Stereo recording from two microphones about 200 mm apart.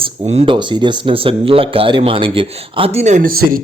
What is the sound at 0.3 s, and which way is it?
Speech, 30° right (ahead or behind).